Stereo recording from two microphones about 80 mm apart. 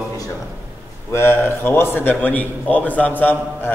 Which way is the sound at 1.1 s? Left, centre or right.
Left.